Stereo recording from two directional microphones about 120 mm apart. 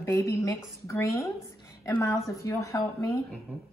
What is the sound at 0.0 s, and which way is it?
A woman's voice, 25° left (ahead or behind).